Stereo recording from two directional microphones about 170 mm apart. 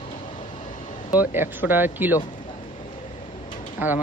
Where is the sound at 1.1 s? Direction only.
10° right (ahead or behind).